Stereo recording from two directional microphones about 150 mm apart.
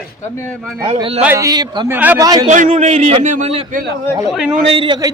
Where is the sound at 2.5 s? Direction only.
50° right (ahead or behind).